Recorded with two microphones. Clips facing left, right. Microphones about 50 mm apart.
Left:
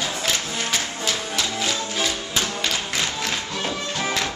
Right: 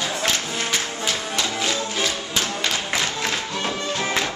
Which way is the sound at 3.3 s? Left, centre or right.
Centre.